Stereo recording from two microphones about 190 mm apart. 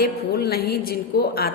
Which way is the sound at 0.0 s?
55° left (ahead or behind).